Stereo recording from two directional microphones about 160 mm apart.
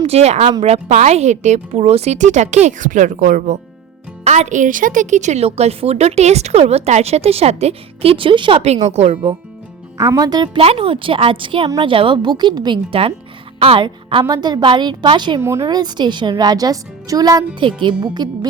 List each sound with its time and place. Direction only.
0.0 s a woman's voice: 40° right (ahead or behind)
10.0 s a woman's voice: 25° right (ahead or behind)
15.4 s speech: 15° right (ahead or behind)